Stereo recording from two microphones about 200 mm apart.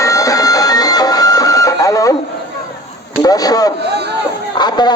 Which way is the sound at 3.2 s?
20° left (ahead or behind).